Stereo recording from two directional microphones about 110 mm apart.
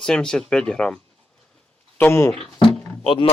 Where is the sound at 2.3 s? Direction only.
5° left (ahead or behind).